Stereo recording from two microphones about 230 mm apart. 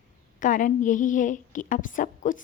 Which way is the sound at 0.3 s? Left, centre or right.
Left.